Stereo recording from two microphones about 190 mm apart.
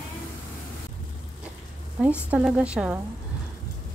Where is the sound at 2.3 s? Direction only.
5° right (ahead or behind).